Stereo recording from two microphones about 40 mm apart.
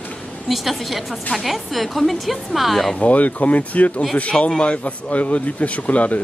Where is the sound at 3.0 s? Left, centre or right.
Left.